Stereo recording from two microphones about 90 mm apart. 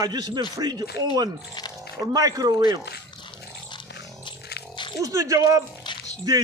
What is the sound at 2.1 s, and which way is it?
Speech, 40° right (ahead or behind).